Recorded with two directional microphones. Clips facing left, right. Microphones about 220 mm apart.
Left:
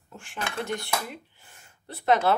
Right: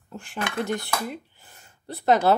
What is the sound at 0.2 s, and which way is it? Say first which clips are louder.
Speech: right 4 dB; 40° right (ahead or behind).